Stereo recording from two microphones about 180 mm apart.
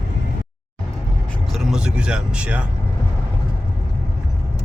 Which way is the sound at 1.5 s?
Centre (ahead or behind).